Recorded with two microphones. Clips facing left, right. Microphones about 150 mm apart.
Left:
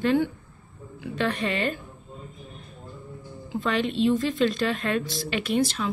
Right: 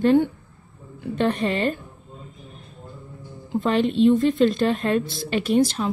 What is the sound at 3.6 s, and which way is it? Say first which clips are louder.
A woman's voice: right 5 dB; 40° right (ahead or behind).